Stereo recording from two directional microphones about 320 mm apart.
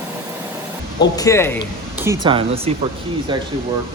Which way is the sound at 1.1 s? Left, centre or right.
Centre.